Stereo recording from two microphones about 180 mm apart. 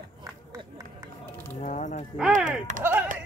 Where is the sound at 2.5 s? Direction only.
40° right (ahead or behind).